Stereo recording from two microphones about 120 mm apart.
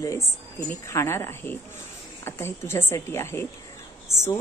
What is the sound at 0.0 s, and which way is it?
Speech, 25° left (ahead or behind).